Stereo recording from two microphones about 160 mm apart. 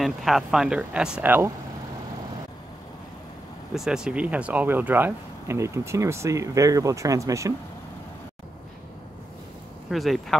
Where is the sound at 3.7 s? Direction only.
5° right (ahead or behind); by 7.6 s 20° right (ahead or behind).